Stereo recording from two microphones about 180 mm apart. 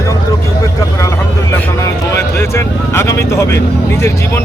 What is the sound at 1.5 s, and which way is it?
Speech, 15° left (ahead or behind).